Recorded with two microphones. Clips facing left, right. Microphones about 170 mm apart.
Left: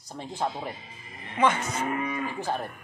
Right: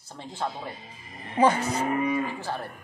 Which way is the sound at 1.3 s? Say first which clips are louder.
Right 3 dB; 35° right (ahead or behind).